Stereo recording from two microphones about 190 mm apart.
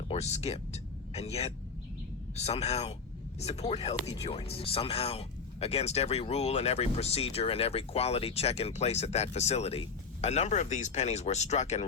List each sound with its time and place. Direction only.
0.1 s speech: 35° left (ahead or behind)